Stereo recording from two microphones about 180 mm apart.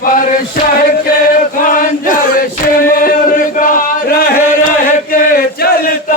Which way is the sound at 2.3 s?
50° left (ahead or behind).